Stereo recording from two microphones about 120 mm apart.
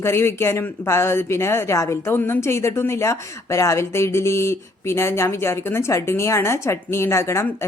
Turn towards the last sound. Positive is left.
turn(degrees=20)  # may be behind; listen again after turning